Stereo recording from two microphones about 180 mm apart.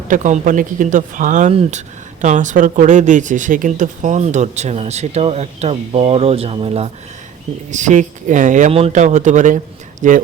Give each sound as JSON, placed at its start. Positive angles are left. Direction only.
{"t": 0.1, "sound": "speech", "side_deg": -45}